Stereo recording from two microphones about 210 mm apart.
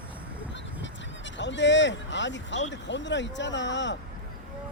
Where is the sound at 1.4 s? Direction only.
60° left (ahead or behind).